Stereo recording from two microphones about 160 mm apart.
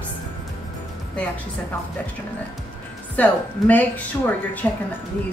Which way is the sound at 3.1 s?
10° left (ahead or behind).